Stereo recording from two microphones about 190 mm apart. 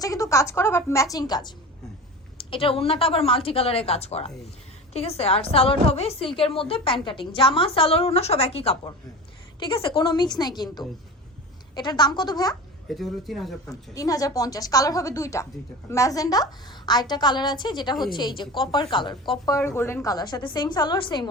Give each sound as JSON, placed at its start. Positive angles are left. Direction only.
{"t": 0.0, "sound": "a woman's voice", "side_deg": 15}
{"t": 12.9, "sound": "speech", "side_deg": 0}
{"t": 13.9, "sound": "a woman's voice", "side_deg": 20}